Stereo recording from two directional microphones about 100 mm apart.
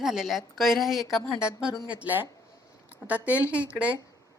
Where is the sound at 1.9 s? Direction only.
15° right (ahead or behind).